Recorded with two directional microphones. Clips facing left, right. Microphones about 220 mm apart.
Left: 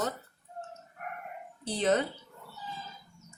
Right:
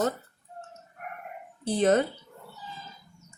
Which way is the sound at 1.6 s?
50° right (ahead or behind).